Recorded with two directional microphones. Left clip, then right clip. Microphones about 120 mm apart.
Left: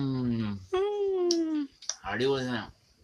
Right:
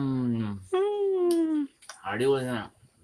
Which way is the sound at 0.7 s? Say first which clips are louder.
Right 3 dB; 10° right (ahead or behind).